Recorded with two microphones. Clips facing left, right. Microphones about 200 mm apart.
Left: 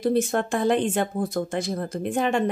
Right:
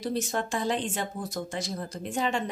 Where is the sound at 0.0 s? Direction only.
55° left (ahead or behind).